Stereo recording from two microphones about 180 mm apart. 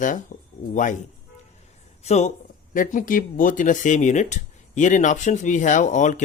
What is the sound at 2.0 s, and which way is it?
Speech, 35° left (ahead or behind).